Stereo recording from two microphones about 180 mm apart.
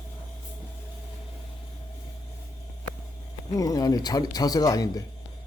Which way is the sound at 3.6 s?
20° left (ahead or behind).